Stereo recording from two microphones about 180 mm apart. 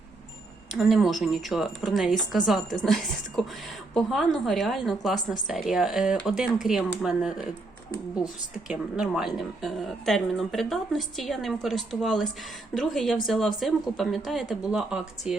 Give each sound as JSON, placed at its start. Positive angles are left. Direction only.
{"t": 0.8, "sound": "a woman's voice", "side_deg": 0}
{"t": 8.5, "sound": "a woman's voice", "side_deg": -5}